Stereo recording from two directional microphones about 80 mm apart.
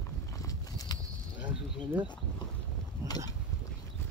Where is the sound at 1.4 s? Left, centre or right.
Right.